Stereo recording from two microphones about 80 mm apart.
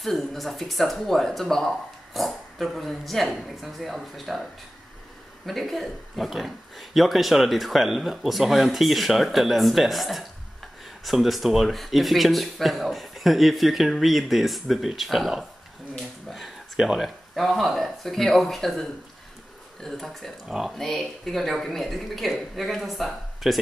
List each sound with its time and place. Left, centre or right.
0.0 s speech: centre
5.5 s speech: centre